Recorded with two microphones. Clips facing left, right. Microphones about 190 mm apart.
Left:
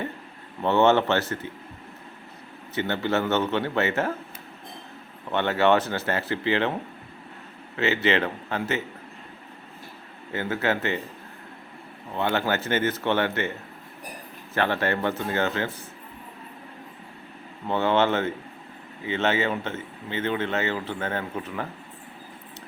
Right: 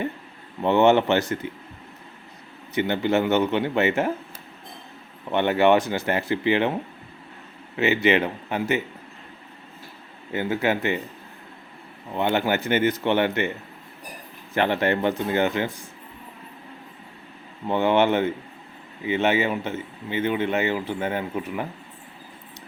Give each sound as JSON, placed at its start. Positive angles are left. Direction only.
{"t": 0.6, "sound": "a man's voice", "side_deg": -15}
{"t": 2.7, "sound": "a man's voice", "side_deg": -15}
{"t": 5.3, "sound": "a man's voice", "side_deg": -15}
{"t": 7.8, "sound": "a man's voice", "side_deg": -15}
{"t": 10.3, "sound": "a man's voice", "side_deg": -15}
{"t": 12.1, "sound": "a man's voice", "side_deg": -20}
{"t": 14.5, "sound": "a man's voice", "side_deg": -15}
{"t": 17.7, "sound": "a man's voice", "side_deg": -15}